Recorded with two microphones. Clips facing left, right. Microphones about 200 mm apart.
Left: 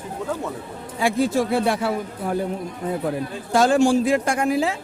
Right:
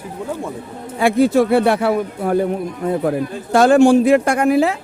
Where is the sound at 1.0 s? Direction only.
60° right (ahead or behind).